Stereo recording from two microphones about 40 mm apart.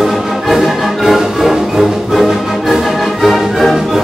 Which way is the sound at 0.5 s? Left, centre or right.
Centre.